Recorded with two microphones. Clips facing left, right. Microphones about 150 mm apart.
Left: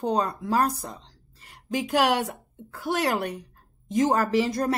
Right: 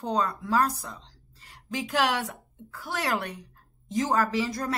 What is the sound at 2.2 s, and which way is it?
Speech, 30° left (ahead or behind).